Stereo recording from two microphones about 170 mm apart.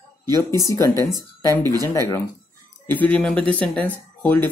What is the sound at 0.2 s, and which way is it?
Speech, 15° left (ahead or behind).